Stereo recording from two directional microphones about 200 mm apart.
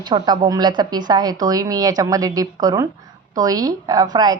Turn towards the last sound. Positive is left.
turn(degrees=-20)  # may be behind; listen again after turning